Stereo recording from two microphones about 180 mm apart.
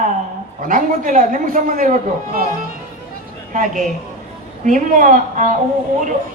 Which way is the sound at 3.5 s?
50° right (ahead or behind).